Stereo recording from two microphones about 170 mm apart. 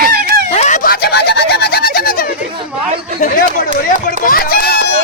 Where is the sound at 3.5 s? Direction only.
50° left (ahead or behind); by 4.9 s 65° left (ahead or behind).